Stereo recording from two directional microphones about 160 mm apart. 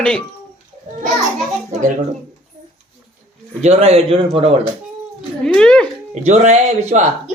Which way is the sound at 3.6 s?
45° right (ahead or behind).